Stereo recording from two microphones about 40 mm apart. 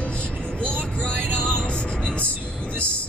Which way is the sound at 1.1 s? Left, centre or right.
Right.